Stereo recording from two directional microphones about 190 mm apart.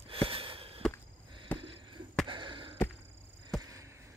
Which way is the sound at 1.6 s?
25° right (ahead or behind).